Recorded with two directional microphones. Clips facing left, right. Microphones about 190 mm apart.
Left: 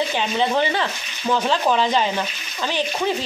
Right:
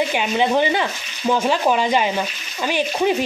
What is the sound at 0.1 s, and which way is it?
Speech, 15° right (ahead or behind).